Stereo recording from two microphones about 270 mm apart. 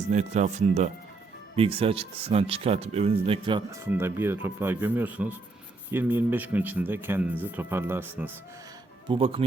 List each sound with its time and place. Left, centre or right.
0.1 s speech: right
1.5 s speech: right
9.0 s speech: centre